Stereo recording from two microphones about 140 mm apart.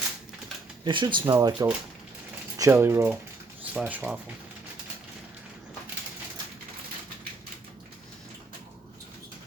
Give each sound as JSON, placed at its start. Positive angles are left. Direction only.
{"t": 0.9, "sound": "speech", "side_deg": -35}
{"t": 1.2, "sound": "speech", "side_deg": -20}